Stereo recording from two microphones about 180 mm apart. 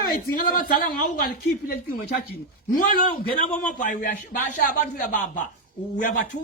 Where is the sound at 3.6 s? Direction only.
45° left (ahead or behind).